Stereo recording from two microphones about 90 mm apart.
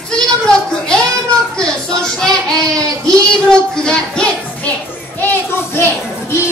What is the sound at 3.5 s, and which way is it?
Children playing, 10° left (ahead or behind).